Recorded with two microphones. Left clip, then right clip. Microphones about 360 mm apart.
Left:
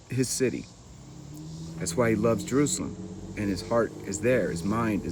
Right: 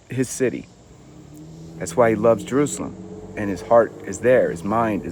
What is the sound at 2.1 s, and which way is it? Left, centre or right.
Speech, centre.